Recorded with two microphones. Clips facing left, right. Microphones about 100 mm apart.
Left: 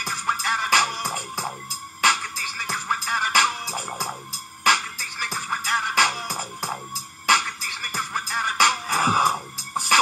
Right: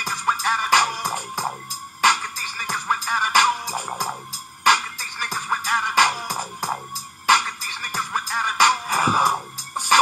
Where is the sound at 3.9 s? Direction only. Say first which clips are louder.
Right 3 dB; 15° right (ahead or behind).